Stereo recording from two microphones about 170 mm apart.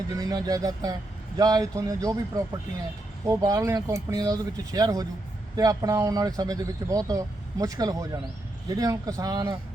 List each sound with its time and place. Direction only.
0.1 s speech: 20° right (ahead or behind)